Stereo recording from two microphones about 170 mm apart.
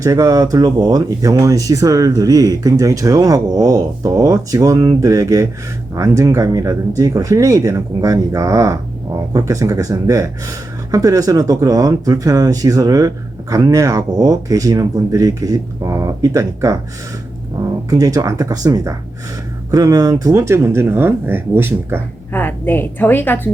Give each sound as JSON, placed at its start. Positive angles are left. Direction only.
{"t": 0.0, "sound": "speech", "side_deg": -20}
{"t": 17.8, "sound": "speech", "side_deg": -20}
{"t": 22.3, "sound": "a woman's voice", "side_deg": 10}